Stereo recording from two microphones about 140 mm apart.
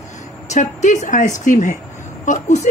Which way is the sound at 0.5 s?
60° left (ahead or behind).